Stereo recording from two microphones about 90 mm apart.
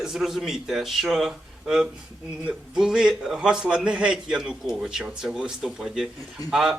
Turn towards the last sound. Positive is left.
turn(degrees=-5)  # may be behind; listen again after turning